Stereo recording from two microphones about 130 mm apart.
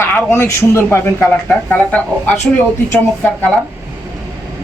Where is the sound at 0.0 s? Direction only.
15° left (ahead or behind).